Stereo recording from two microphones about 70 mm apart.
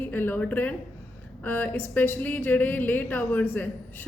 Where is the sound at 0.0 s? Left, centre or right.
Left.